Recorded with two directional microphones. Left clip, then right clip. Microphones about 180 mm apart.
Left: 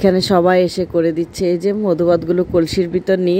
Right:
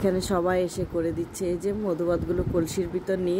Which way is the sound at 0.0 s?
40° left (ahead or behind).